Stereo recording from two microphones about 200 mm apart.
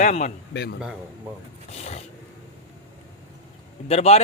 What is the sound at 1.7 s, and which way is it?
Speech, 30° left (ahead or behind).